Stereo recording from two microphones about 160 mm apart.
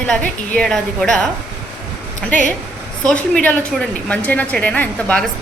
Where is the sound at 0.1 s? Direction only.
5° left (ahead or behind).